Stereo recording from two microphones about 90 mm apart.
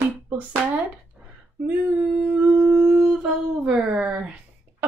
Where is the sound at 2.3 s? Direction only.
10° right (ahead or behind).